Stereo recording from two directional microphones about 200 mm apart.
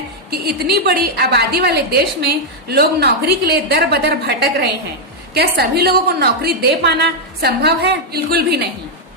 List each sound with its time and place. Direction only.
0.3 s a woman's voice: 50° right (ahead or behind)